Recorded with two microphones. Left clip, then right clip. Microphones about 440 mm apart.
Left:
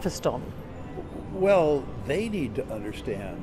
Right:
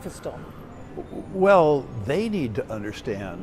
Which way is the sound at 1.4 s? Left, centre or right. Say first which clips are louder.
Right 4 dB; right.